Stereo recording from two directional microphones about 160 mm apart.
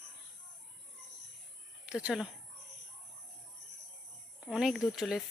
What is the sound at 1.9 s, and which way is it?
Speech, 5° right (ahead or behind).